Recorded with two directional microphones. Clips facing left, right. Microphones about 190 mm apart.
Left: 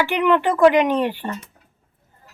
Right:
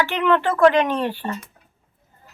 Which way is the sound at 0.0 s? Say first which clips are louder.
Left 1 dB; 15° left (ahead or behind).